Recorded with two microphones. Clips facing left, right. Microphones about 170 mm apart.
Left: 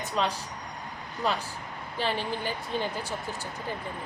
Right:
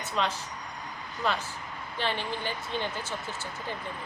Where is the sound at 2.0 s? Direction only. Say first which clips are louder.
Left 2 dB; 40° left (ahead or behind).